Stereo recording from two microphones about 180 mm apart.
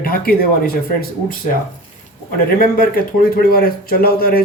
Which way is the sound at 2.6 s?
55° left (ahead or behind).